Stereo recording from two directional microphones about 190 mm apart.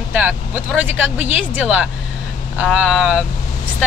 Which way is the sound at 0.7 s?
5° right (ahead or behind).